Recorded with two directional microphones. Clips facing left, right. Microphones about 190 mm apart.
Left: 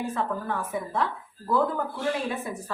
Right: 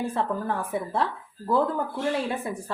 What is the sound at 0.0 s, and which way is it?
A woman's voice, 30° right (ahead or behind).